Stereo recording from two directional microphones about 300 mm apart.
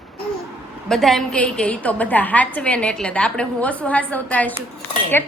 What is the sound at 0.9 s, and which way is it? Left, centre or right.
A woman's voice, centre.